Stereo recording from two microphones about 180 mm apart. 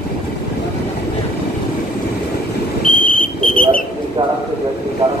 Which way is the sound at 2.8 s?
50° left (ahead or behind).